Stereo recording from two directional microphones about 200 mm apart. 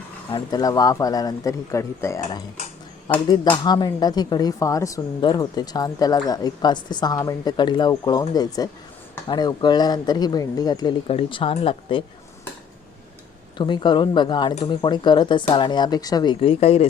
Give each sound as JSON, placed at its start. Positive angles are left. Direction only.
{"t": 0.3, "sound": "speech", "side_deg": 20}
{"t": 3.2, "sound": "speech", "side_deg": 20}
{"t": 13.6, "sound": "speech", "side_deg": 25}